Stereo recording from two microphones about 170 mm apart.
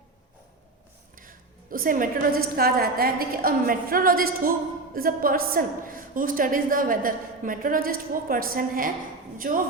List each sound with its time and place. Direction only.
1.1 s a woman's voice: 55° right (ahead or behind)